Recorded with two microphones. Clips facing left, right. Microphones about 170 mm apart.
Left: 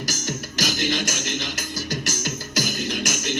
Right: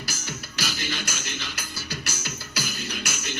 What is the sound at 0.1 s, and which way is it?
Music, 45° left (ahead or behind).